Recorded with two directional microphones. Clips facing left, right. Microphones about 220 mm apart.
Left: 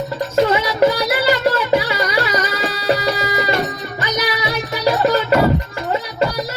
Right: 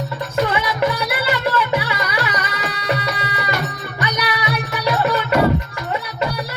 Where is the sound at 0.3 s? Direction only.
35° left (ahead or behind).